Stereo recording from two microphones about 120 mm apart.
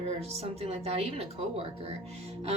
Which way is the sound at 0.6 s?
60° right (ahead or behind).